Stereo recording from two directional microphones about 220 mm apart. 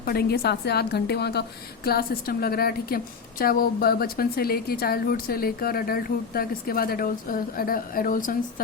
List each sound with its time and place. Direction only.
0.0 s a woman's voice: 45° left (ahead or behind)